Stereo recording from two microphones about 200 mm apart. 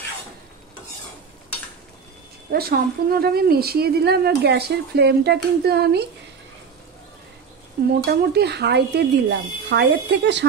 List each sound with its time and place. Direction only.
2.5 s speech: 50° right (ahead or behind)
8.0 s speech: 55° right (ahead or behind)